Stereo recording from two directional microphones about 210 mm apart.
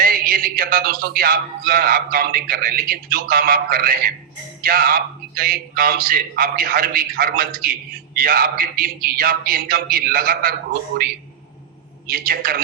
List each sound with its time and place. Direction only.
0.0 s a man's voice: 45° right (ahead or behind)